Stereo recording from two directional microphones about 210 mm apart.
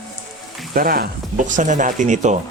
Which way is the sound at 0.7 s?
45° right (ahead or behind).